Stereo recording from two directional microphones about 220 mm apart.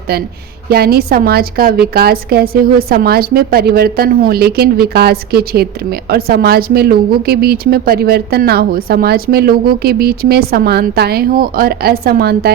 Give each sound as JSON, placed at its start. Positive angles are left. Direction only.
{"t": 0.1, "sound": "a woman's voice", "side_deg": -45}